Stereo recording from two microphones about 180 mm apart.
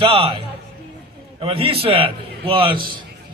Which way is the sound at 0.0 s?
30° right (ahead or behind).